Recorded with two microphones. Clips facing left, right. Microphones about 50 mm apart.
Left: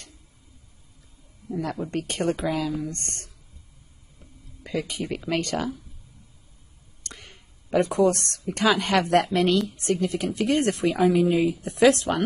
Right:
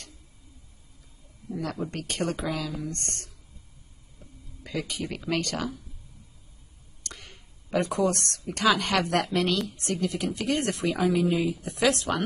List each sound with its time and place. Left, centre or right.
1.6 s speech: left
2.4 s a woman's voice: left
4.6 s a woman's voice: left
7.7 s a woman's voice: left
10.3 s speech: left
11.8 s a woman's voice: left